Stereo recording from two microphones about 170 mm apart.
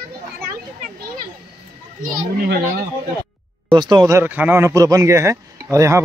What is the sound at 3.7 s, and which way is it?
Speech, 25° right (ahead or behind).